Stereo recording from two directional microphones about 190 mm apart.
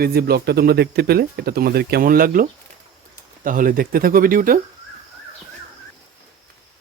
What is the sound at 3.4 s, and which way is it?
Speech, 45° right (ahead or behind).